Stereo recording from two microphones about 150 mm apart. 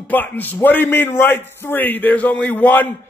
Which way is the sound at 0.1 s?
10° left (ahead or behind).